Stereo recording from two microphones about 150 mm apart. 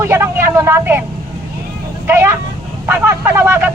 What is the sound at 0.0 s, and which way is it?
Speech, 15° right (ahead or behind).